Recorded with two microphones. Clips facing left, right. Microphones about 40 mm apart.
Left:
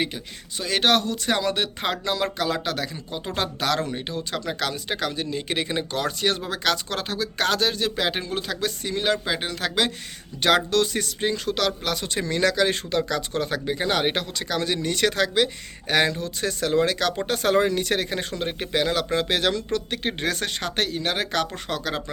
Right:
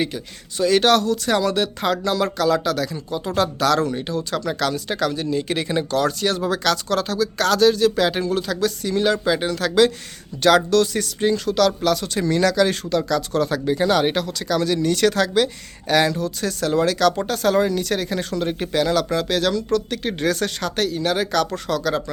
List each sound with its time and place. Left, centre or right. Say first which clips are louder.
0.0 s speech: right 3 dB; centre
17.3 s speech: right 2 dB; left
19.1 s speech: right 2 dB; left
19.9 s speech: right 4 dB; left